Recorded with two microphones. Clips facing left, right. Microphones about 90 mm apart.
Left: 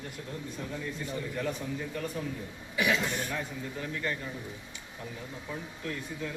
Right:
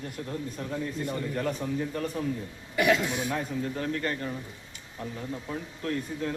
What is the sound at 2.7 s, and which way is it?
Speech, 55° right (ahead or behind).